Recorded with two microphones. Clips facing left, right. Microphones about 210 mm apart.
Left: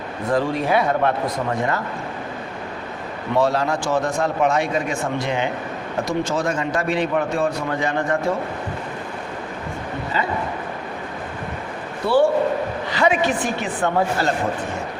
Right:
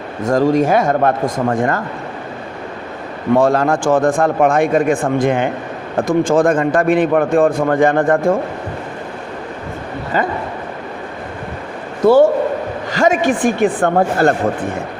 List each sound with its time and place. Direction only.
0.3 s a man's voice: 45° right (ahead or behind)
3.3 s a man's voice: 50° right (ahead or behind)
10.1 s a man's voice: 50° right (ahead or behind)
12.0 s a man's voice: 45° right (ahead or behind)